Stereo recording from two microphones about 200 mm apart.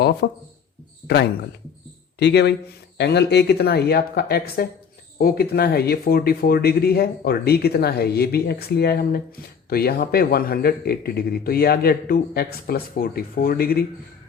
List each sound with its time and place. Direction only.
0.2 s a man's voice: 55° left (ahead or behind)